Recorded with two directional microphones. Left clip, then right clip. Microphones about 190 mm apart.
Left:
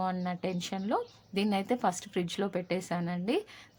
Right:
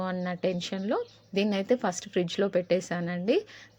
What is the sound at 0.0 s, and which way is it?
Speech, 10° right (ahead or behind).